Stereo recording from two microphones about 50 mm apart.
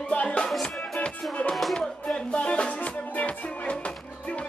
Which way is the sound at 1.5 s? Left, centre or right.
Centre.